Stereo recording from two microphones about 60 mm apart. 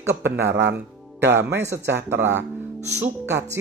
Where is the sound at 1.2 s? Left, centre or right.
Right.